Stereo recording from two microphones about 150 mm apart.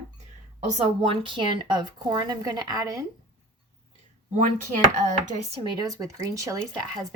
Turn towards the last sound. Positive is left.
turn(degrees=-20)  # may be behind; listen again after turning